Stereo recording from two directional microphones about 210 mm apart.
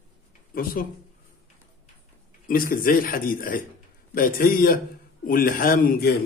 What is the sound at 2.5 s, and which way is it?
A man's voice, 40° left (ahead or behind).